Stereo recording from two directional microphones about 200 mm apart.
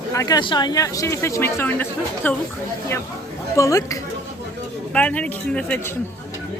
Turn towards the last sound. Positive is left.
turn(degrees=5)  # may be behind; listen again after turning